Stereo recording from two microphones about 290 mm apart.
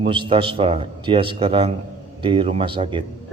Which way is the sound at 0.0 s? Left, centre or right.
Centre.